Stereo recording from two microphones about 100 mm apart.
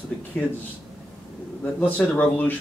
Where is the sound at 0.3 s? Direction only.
10° left (ahead or behind).